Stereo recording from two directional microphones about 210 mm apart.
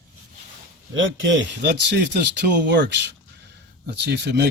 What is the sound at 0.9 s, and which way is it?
Speech, 65° right (ahead or behind).